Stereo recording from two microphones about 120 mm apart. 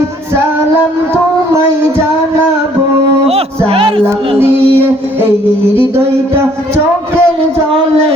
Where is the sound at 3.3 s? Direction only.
55° right (ahead or behind).